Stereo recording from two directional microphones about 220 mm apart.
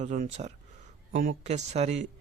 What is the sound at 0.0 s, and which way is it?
Speech, 30° right (ahead or behind).